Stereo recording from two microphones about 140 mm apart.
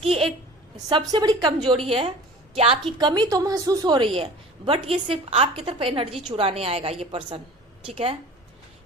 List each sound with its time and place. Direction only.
0.0 s a sound: 45° right (ahead or behind)
0.9 s a woman's voice: 30° right (ahead or behind)
1.7 s a woman's voice: 40° right (ahead or behind)
3.0 s a woman's voice: 30° right (ahead or behind)